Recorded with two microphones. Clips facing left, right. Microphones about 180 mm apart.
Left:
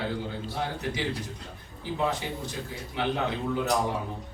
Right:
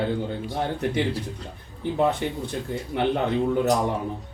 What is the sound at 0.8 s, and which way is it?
Speech, 55° right (ahead or behind).